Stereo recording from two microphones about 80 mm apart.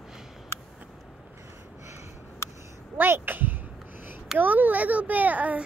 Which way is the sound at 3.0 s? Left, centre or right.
Right.